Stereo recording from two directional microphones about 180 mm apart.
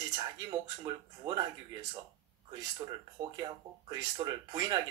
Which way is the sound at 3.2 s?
20° right (ahead or behind).